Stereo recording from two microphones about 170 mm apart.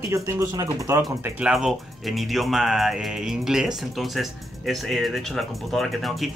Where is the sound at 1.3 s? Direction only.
5° right (ahead or behind).